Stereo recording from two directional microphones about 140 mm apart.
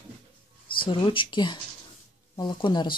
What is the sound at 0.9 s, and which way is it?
Speech, 35° left (ahead or behind).